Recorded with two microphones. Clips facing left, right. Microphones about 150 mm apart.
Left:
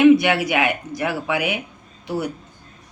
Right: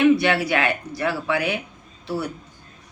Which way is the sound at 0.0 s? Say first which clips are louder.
Left 4 dB; 15° left (ahead or behind).